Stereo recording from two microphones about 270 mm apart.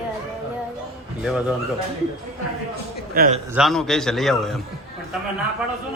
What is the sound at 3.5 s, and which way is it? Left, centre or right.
A man's voice, centre.